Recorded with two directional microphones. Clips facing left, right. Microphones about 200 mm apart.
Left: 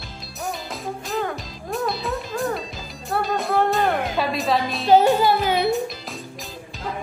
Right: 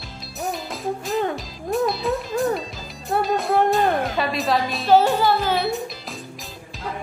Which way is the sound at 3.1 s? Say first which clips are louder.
Right 2 dB; 20° right (ahead or behind).